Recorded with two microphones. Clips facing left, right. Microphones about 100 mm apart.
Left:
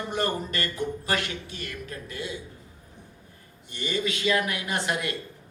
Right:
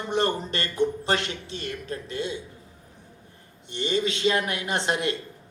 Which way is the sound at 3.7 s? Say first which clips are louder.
Right 3 dB; 25° right (ahead or behind).